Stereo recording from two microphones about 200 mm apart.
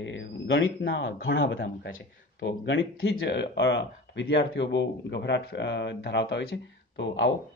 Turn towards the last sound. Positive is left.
turn(degrees=65)  # may be behind; listen again after turning